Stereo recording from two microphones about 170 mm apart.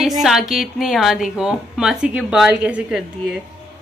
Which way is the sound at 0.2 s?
Centre (ahead or behind).